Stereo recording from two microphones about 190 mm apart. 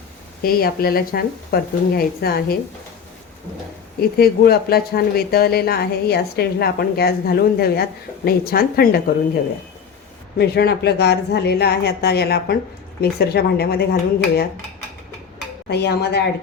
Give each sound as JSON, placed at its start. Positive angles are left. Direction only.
{"t": 0.4, "sound": "speech", "side_deg": 50}
{"t": 4.2, "sound": "a woman's voice", "side_deg": 55}
{"t": 15.7, "sound": "a woman's voice", "side_deg": 60}